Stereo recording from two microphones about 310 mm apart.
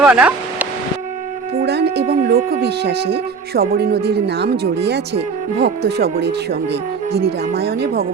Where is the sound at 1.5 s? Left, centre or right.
Right.